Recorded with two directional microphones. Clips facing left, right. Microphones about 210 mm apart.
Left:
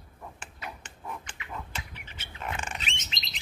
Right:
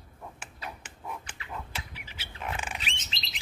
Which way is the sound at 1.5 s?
5° right (ahead or behind).